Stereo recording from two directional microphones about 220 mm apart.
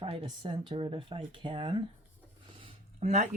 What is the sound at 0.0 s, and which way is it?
Speech, 25° right (ahead or behind).